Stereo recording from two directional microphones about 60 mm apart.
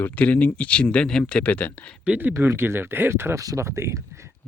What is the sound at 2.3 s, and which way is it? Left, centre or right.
Speech, right.